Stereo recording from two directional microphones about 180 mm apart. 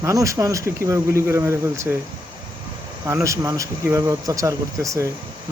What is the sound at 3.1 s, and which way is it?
Speech, 15° right (ahead or behind).